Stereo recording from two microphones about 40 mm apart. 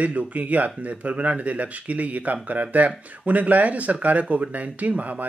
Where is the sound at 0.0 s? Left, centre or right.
Right.